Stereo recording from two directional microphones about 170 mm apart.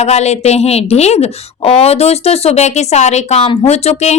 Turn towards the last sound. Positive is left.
turn(degrees=40)  # may be behind; listen again after turning